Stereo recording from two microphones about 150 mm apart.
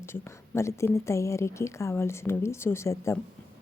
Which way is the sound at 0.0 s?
15° left (ahead or behind).